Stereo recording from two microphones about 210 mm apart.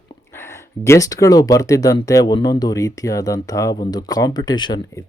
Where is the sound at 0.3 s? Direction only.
10° left (ahead or behind).